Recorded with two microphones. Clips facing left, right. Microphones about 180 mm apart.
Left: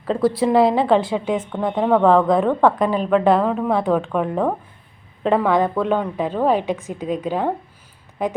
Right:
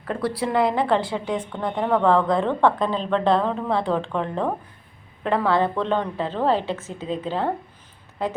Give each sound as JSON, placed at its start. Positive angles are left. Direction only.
{"t": 0.3, "sound": "a woman's voice", "side_deg": 25}